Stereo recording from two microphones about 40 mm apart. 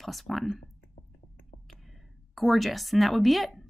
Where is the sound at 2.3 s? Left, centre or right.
Centre.